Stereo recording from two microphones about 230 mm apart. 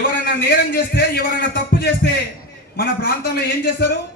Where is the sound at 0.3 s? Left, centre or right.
Left.